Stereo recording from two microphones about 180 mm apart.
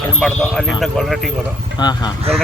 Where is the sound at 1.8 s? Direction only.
25° left (ahead or behind).